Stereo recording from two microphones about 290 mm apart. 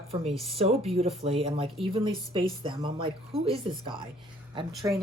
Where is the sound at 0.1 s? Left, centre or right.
Centre.